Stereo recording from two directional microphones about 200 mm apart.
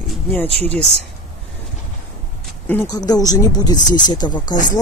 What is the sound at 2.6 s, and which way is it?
Speech, 10° left (ahead or behind).